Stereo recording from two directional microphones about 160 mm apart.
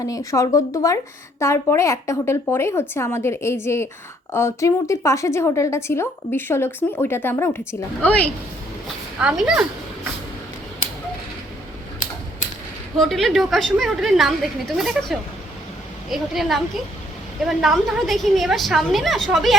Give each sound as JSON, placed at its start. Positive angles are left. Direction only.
{"t": 0.0, "sound": "speech", "side_deg": 20}
{"t": 9.2, "sound": "a woman's voice", "side_deg": -5}
{"t": 13.0, "sound": "a woman's voice", "side_deg": 0}